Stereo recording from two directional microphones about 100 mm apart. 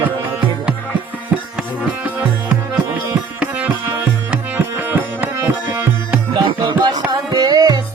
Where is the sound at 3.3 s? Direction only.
15° right (ahead or behind).